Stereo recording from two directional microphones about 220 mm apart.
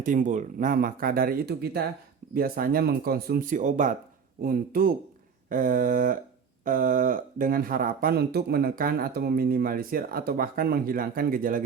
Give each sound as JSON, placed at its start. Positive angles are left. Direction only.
{"t": 0.0, "sound": "speech", "side_deg": -35}